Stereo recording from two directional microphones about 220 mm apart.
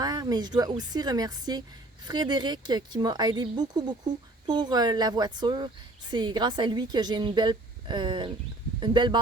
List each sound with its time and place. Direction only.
0.0 s a woman's voice: 15° right (ahead or behind)